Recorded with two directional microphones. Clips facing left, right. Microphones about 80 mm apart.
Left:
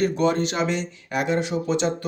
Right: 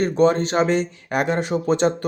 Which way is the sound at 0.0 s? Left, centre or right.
Right.